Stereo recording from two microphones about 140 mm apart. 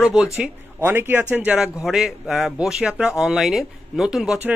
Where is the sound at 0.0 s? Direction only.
5° right (ahead or behind).